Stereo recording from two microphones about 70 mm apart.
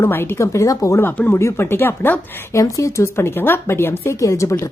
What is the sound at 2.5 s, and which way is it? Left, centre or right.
A woman's voice, left.